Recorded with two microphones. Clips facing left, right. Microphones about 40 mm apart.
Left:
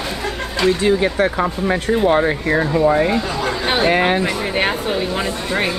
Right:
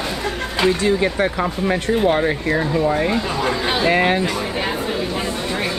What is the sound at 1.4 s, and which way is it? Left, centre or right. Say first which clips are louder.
Speech: left 1 dB; centre.